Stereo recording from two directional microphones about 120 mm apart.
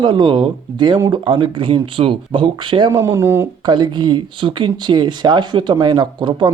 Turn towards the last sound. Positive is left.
turn(degrees=-40)  # may be behind; listen again after turning